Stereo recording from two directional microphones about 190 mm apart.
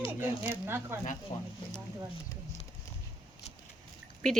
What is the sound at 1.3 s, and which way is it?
Speech, 40° left (ahead or behind).